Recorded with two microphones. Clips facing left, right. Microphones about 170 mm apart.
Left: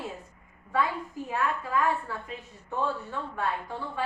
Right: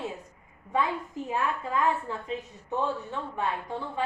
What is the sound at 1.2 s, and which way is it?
A woman's voice, 20° right (ahead or behind).